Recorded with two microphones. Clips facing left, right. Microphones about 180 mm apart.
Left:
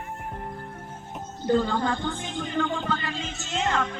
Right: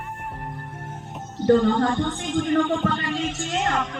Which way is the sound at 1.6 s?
90° right.